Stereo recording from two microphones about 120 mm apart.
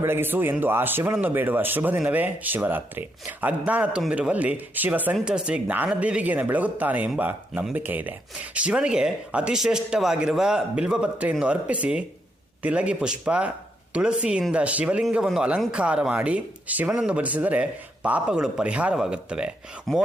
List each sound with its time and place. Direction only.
0.0 s speech: 20° right (ahead or behind)